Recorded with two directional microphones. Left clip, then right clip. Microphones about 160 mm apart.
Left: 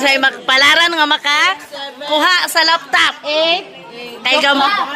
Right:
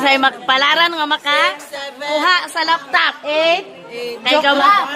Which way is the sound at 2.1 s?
85° left.